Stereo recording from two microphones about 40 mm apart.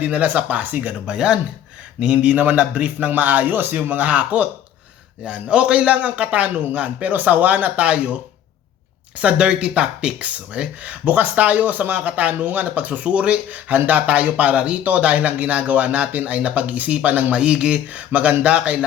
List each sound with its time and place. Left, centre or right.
0.0 s speech: right
1.0 s speech: right
2.1 s speech: right
4.0 s speech: right
5.2 s speech: right
7.1 s speech: right
9.1 s speech: right